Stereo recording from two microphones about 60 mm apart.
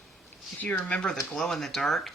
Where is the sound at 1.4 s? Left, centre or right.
Centre.